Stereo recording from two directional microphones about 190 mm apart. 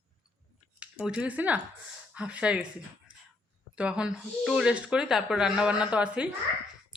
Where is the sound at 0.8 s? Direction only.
5° right (ahead or behind).